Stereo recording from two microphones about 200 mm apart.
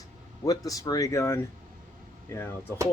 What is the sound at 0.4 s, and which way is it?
Speech, 15° left (ahead or behind).